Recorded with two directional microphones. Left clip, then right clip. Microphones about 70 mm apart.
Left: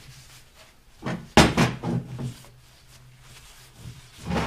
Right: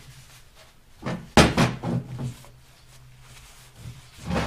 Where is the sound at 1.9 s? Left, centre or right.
Centre.